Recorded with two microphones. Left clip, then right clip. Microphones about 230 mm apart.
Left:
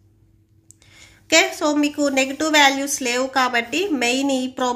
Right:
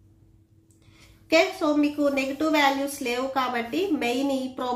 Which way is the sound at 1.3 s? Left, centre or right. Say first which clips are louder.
Left 4 dB; left.